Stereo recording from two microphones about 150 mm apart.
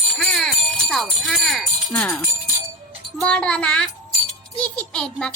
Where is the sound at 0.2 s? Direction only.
5° left (ahead or behind).